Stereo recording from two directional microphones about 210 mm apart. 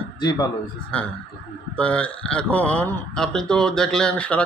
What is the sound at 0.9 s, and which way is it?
A man's voice, 5° left (ahead or behind).